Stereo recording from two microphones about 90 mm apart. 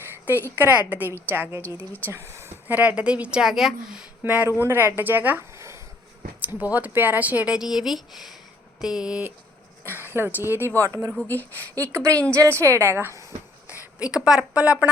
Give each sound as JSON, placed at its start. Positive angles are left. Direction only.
{"t": 0.5, "sound": "a woman's voice", "side_deg": -20}
{"t": 2.7, "sound": "speech", "side_deg": -15}
{"t": 4.2, "sound": "a woman's voice", "side_deg": -20}
{"t": 5.5, "sound": "a sound", "side_deg": -35}
{"t": 6.4, "sound": "speech", "side_deg": -20}
{"t": 9.8, "sound": "a woman's voice", "side_deg": -25}
{"t": 10.8, "sound": "a woman's voice", "side_deg": -40}
{"t": 11.2, "sound": "speech", "side_deg": 20}
{"t": 11.9, "sound": "a woman's voice", "side_deg": -35}
{"t": 13.7, "sound": "a sound", "side_deg": -20}
{"t": 14.3, "sound": "speech", "side_deg": -10}